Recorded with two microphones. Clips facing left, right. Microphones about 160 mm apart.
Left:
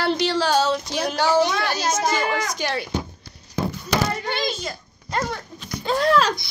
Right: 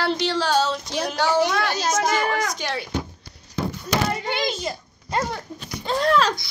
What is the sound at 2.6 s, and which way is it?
Speech, 5° left (ahead or behind).